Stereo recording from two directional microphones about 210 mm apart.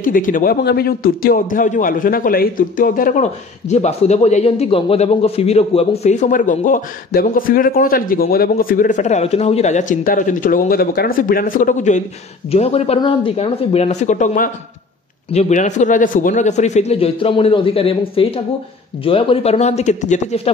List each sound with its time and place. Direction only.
0.0 s a man's voice: 40° left (ahead or behind)